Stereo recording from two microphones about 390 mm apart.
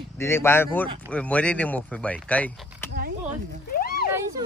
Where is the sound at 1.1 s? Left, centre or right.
Centre.